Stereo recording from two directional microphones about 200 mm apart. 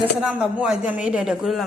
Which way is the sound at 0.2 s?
5° right (ahead or behind).